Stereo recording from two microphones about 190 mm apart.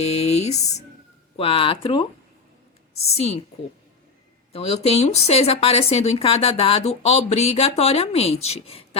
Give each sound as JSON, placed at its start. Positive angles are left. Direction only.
{"t": 0.0, "sound": "music", "side_deg": 35}
{"t": 1.4, "sound": "speech", "side_deg": 30}
{"t": 3.1, "sound": "speech", "side_deg": 35}
{"t": 4.5, "sound": "speech", "side_deg": 35}